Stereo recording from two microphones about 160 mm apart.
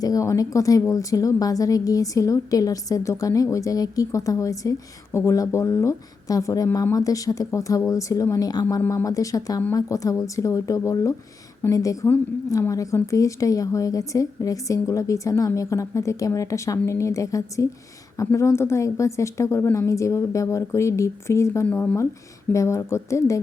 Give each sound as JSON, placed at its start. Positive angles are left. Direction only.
{"t": 0.0, "sound": "a woman's voice", "side_deg": 20}